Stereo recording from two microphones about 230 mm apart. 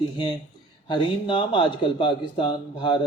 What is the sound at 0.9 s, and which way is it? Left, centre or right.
Speech, left.